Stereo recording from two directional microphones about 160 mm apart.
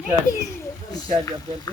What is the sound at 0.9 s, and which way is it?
Speech, 25° left (ahead or behind).